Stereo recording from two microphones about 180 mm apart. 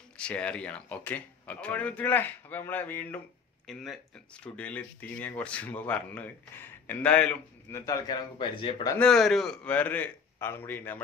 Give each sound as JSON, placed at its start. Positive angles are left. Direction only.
{"t": 0.2, "sound": "speech", "side_deg": 5}
{"t": 7.8, "sound": "a man's voice", "side_deg": 20}
{"t": 8.9, "sound": "speech", "side_deg": 5}